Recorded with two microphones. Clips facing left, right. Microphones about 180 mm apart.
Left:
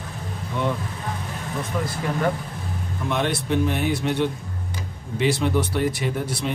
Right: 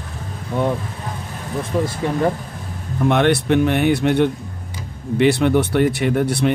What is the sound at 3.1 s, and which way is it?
Speech, 65° right (ahead or behind).